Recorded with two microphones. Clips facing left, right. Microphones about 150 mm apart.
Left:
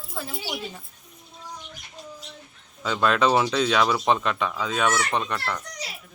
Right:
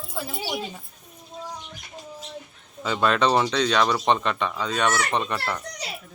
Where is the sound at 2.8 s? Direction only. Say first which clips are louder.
Even; centre (ahead or behind).